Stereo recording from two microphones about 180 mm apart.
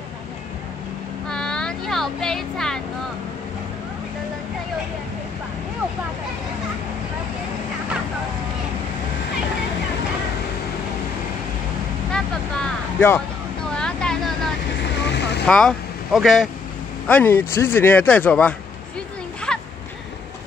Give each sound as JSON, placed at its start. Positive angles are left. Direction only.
{"t": 1.3, "sound": "vehicle", "side_deg": 5}
{"t": 12.1, "sound": "vehicle", "side_deg": 5}
{"t": 15.0, "sound": "vehicle", "side_deg": 70}
{"t": 15.4, "sound": "speech", "side_deg": 5}
{"t": 19.5, "sound": "a sound", "side_deg": 5}